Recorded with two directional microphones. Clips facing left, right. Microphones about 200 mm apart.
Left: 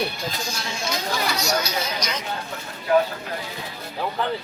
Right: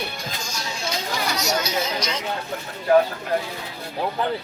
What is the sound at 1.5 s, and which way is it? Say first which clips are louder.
Chatter: right 1 dB; 25° right (ahead or behind).